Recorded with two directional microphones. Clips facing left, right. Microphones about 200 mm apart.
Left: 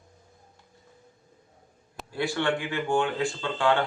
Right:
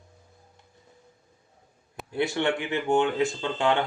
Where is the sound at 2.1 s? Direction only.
20° right (ahead or behind).